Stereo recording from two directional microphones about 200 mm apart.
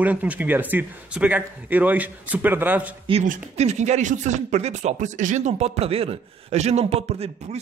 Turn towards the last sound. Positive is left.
turn(degrees=-30)  # may be behind; listen again after turning